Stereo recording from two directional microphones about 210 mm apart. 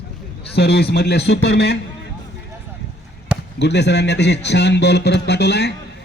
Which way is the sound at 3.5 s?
55° left (ahead or behind).